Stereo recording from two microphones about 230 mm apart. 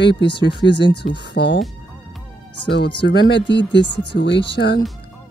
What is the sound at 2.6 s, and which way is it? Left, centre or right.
Speech, left.